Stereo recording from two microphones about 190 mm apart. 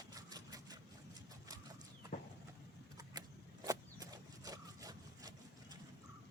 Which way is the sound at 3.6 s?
20° right (ahead or behind).